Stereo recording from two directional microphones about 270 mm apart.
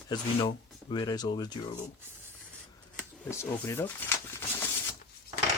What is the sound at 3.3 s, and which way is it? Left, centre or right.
Speech, centre.